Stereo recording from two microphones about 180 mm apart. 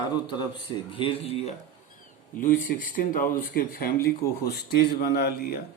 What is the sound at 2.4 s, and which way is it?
Speech, 50° left (ahead or behind).